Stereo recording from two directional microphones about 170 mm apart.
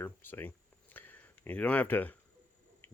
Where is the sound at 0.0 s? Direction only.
10° left (ahead or behind).